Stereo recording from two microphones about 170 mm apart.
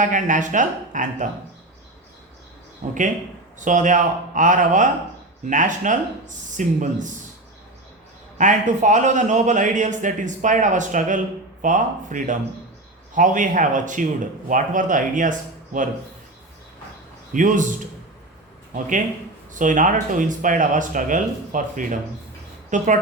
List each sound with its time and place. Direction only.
0.0 s a man's voice: 50° right (ahead or behind)
2.8 s a man's voice: 50° right (ahead or behind)
8.4 s a man's voice: 45° right (ahead or behind)
17.3 s a man's voice: 50° right (ahead or behind)
18.7 s a man's voice: 50° right (ahead or behind)